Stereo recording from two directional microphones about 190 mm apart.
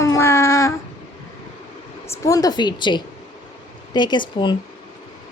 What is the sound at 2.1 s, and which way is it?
A woman's voice, 15° left (ahead or behind).